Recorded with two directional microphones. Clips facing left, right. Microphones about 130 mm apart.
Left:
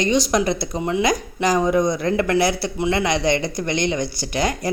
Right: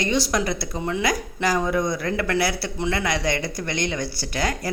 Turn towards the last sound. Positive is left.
turn(degrees=20)  # may be behind; listen again after turning